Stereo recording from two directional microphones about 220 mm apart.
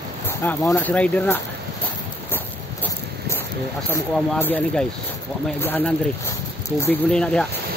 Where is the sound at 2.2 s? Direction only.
10° left (ahead or behind).